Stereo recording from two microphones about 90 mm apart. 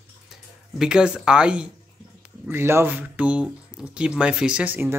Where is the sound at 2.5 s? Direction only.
25° right (ahead or behind).